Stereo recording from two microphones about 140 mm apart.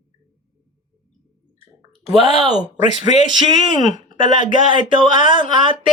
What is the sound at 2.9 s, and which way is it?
Speech, 55° left (ahead or behind).